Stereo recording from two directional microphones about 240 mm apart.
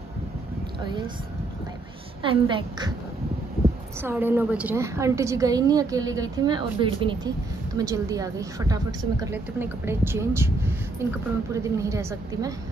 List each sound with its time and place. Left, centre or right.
2.2 s a woman's voice: centre
4.0 s a woman's voice: centre